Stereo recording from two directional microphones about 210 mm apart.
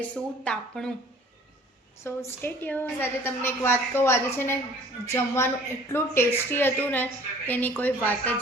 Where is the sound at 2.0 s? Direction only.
10° left (ahead or behind).